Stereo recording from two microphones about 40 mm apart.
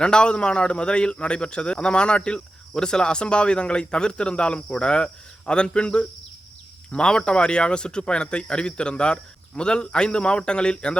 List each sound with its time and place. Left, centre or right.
0.0 s a man's voice: left